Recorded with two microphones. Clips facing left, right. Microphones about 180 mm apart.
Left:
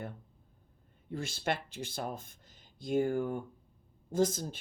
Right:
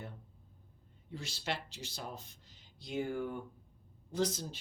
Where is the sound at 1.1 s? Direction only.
50° left (ahead or behind).